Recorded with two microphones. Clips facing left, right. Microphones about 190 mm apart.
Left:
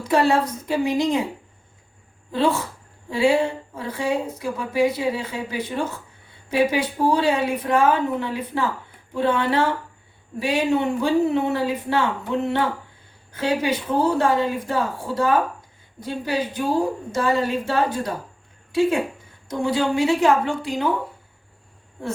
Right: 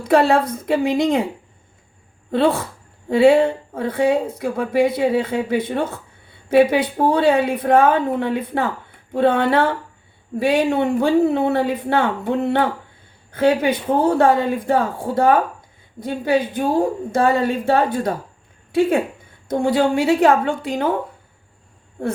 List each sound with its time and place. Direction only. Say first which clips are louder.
0.0 s speech: right 4 dB; 55° right (ahead or behind)
2.3 s a woman's voice: right 4 dB; 60° right (ahead or behind)